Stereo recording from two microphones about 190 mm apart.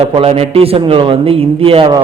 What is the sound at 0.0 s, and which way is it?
A man's voice, 30° right (ahead or behind).